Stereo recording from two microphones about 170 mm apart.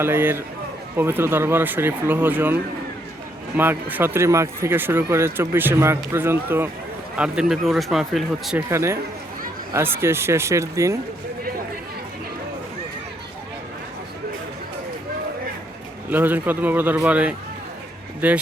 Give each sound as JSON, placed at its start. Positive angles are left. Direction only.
{"t": 0.0, "sound": "speech", "side_deg": -15}
{"t": 3.6, "sound": "speech", "side_deg": -10}
{"t": 8.7, "sound": "speech", "side_deg": -15}
{"t": 16.0, "sound": "speech", "side_deg": -10}